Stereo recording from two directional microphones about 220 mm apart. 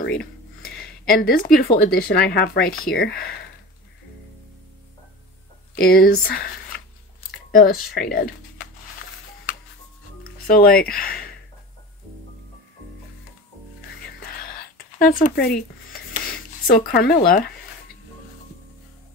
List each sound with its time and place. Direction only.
0.0 s speech: 45° left (ahead or behind)
5.8 s speech: 40° left (ahead or behind)
10.2 s speech: 40° left (ahead or behind)
14.2 s a sound: 40° left (ahead or behind)